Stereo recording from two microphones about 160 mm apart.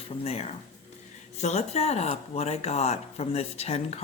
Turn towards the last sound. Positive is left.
turn(degrees=40)  # may be behind; listen again after turning